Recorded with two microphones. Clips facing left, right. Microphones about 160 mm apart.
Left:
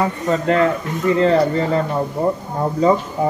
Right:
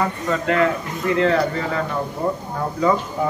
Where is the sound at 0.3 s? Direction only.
30° left (ahead or behind).